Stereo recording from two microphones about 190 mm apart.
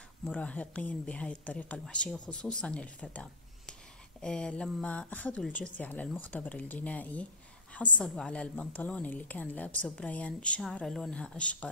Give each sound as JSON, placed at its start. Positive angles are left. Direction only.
{"t": 0.2, "sound": "a woman's voice", "side_deg": 5}